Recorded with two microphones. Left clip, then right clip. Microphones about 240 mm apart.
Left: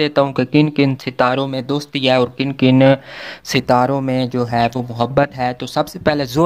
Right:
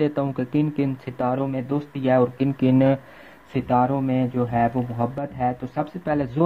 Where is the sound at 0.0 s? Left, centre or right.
Centre.